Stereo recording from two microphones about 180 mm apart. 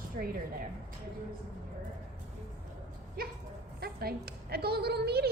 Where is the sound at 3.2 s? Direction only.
55° right (ahead or behind).